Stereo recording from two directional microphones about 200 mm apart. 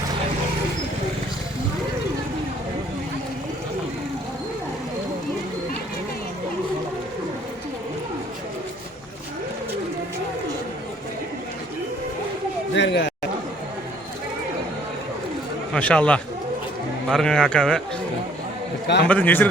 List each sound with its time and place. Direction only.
12.7 s a sound: 60° left (ahead or behind)
15.7 s a man's voice: 5° left (ahead or behind)
19.0 s a man's voice: 10° left (ahead or behind)